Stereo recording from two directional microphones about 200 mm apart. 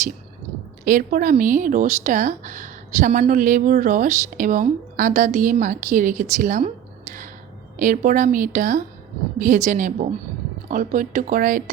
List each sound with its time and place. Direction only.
0.9 s speech: 45° right (ahead or behind)
7.8 s speech: 40° right (ahead or behind)